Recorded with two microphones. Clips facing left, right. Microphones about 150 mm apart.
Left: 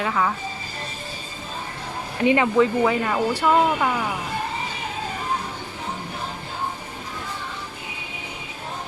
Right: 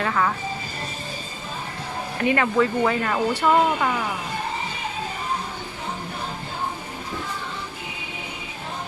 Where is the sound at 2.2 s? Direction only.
15° left (ahead or behind).